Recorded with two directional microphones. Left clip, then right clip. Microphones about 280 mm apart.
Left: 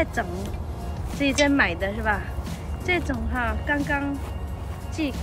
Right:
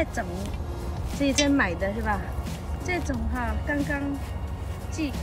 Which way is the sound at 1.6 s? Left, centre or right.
Centre.